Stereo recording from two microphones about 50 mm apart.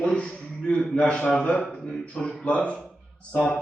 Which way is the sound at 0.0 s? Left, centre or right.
Centre.